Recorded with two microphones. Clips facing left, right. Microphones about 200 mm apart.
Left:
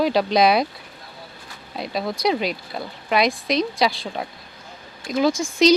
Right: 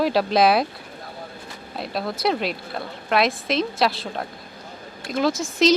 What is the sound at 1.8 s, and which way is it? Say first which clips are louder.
Speech: left 1 dB; centre (ahead or behind).